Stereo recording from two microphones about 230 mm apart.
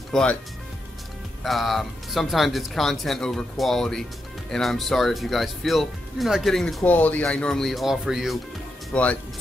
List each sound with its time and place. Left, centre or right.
0.1 s speech: centre
1.4 s speech: centre